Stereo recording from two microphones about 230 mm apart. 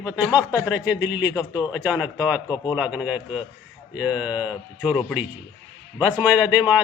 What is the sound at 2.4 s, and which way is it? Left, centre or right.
Speech, centre.